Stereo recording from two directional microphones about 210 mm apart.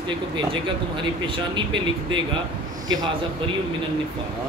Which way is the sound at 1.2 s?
25° right (ahead or behind).